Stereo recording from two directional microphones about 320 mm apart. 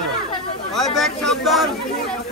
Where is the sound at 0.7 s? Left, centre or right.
Centre.